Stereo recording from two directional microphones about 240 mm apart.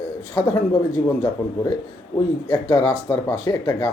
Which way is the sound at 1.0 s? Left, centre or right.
Centre.